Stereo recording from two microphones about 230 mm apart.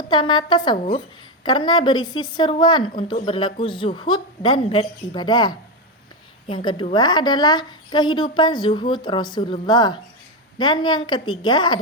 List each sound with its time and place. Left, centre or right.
0.1 s a woman's voice: left